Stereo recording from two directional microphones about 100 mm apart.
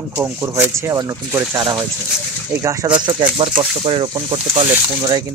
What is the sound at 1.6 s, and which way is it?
Speech, 40° right (ahead or behind).